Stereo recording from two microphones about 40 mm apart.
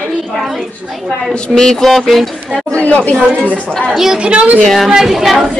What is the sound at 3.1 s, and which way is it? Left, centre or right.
Speech, centre.